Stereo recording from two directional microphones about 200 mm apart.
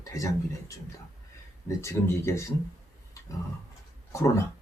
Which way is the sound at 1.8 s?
15° left (ahead or behind).